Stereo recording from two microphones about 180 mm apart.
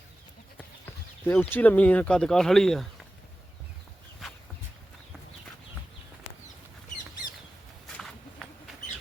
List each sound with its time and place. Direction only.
1.2 s speech: 10° left (ahead or behind)